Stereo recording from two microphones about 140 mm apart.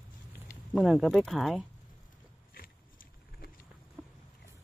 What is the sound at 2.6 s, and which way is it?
Biting, 90° left.